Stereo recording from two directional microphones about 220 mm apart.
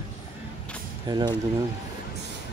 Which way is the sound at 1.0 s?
20° right (ahead or behind).